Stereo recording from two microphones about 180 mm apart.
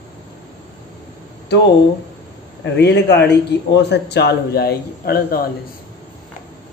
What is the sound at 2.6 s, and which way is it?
A man's voice, 70° left (ahead or behind).